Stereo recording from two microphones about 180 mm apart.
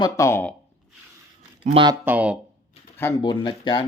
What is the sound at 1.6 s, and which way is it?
Speech, 35° right (ahead or behind).